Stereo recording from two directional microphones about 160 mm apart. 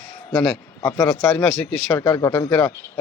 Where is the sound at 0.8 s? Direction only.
20° left (ahead or behind).